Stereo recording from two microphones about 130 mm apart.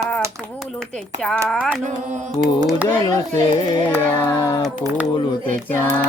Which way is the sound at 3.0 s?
30° left (ahead or behind).